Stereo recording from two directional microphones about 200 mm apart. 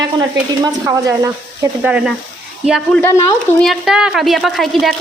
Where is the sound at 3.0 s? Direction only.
10° left (ahead or behind).